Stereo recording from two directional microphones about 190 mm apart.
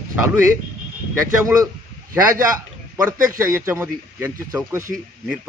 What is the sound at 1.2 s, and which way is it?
Speech, 15° right (ahead or behind).